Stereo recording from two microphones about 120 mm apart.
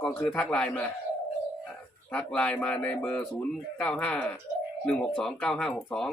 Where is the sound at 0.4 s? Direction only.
5° left (ahead or behind).